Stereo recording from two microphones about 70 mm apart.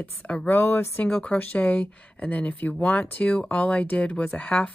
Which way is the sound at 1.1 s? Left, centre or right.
Centre.